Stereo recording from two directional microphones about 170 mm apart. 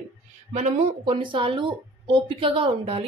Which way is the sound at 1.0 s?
30° right (ahead or behind).